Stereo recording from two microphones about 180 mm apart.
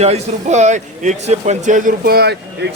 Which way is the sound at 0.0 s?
40° right (ahead or behind).